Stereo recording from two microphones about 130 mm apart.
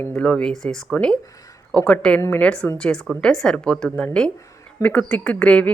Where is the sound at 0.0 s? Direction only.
15° left (ahead or behind).